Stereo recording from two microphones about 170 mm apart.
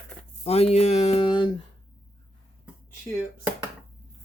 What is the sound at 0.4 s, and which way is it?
Speech, 40° left (ahead or behind).